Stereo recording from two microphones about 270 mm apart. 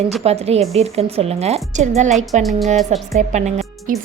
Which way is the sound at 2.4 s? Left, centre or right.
Centre.